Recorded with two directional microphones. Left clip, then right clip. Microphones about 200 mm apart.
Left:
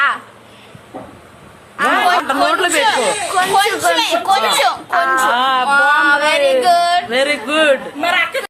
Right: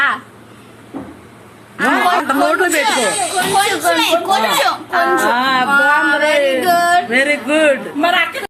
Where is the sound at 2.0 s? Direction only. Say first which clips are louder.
Even; 5° left (ahead or behind).